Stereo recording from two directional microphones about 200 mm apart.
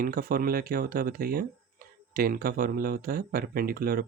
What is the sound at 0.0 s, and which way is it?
Speech, 45° right (ahead or behind).